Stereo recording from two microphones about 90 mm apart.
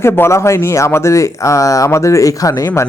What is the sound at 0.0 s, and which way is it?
Speech, 25° left (ahead or behind).